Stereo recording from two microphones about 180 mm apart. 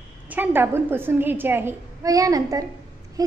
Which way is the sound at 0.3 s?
10° right (ahead or behind).